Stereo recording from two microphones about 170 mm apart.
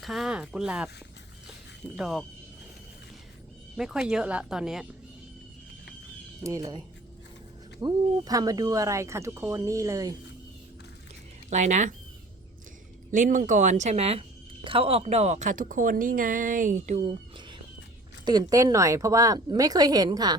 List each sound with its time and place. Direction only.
0.0 s speech: centre (ahead or behind)
2.0 s speech: centre (ahead or behind)
3.8 s speech: 5° right (ahead or behind)
6.4 s speech: 20° right (ahead or behind)
11.4 s a woman's voice: 45° right (ahead or behind)
13.1 s a woman's voice: 50° right (ahead or behind)
18.3 s speech: 25° right (ahead or behind)